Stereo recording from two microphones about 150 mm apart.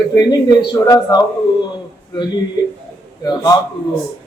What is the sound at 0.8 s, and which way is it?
Speech, 25° left (ahead or behind).